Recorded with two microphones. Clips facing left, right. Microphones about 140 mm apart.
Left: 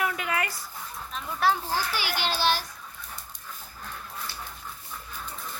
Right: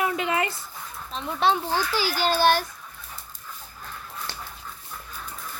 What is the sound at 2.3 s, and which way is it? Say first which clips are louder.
Speech: right 6 dB; 50° right (ahead or behind).